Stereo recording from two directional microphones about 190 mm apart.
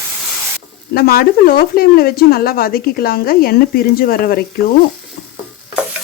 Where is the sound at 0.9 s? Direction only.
50° left (ahead or behind).